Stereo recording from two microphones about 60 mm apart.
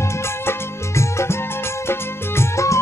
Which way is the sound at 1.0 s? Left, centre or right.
Left.